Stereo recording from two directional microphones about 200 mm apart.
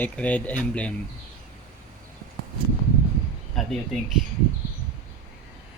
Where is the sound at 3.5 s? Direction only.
Centre (ahead or behind).